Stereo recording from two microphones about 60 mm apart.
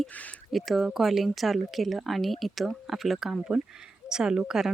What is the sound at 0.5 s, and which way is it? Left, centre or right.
Speech, centre.